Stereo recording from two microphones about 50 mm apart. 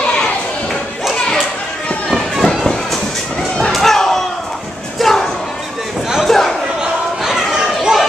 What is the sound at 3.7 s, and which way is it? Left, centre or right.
Slam, centre.